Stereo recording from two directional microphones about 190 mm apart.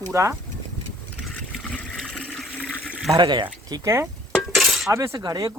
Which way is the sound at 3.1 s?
25° right (ahead or behind).